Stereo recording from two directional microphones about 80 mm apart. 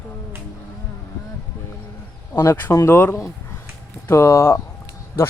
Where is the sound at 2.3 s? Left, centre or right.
Left.